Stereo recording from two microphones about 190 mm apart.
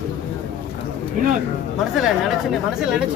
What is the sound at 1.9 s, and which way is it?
Speech, centre (ahead or behind).